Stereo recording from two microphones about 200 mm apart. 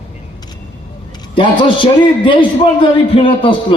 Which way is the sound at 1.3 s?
25° left (ahead or behind).